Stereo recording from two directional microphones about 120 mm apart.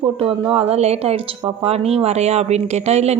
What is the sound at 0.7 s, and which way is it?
A woman's voice, 60° right (ahead or behind).